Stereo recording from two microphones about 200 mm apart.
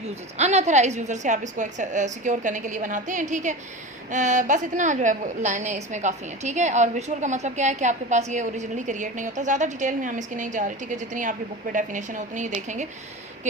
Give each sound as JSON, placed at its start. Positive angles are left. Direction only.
{"t": 0.3, "sound": "a woman's voice", "side_deg": -35}